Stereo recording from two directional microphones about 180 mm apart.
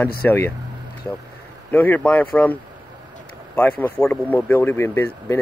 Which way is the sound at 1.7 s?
10° left (ahead or behind).